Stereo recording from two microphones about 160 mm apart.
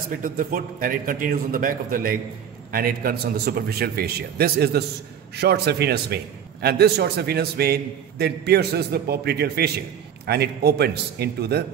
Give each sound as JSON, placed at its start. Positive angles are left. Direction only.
{"t": 0.2, "sound": "a man's voice", "side_deg": -60}
{"t": 5.3, "sound": "a man's voice", "side_deg": -90}